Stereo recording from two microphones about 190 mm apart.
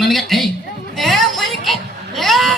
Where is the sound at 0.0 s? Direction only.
Centre (ahead or behind).